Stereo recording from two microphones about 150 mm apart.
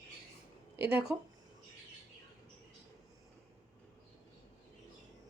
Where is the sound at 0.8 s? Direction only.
90° right.